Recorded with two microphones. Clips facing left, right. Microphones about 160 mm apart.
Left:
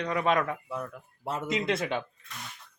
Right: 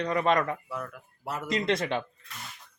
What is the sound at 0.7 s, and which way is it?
Speech, 20° left (ahead or behind).